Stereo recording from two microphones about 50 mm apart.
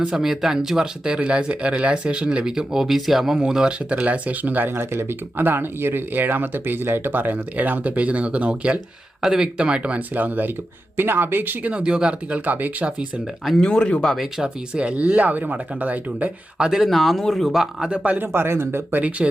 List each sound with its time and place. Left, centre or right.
0.1 s speech: centre
3.9 s speech: right
4.7 s speech: right
9.2 s speech: centre
10.2 s speech: right
11.7 s speech: centre
12.3 s speech: right
13.6 s speech: centre
14.4 s speech: centre
15.0 s speech: right
16.6 s speech: centre
16.9 s speech: centre
17.8 s speech: right
18.3 s speech: right